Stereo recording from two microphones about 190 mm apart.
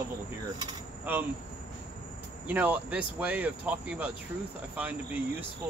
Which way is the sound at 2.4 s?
10° right (ahead or behind).